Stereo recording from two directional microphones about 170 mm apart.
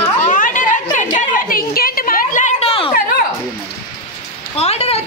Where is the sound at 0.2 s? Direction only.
50° left (ahead or behind).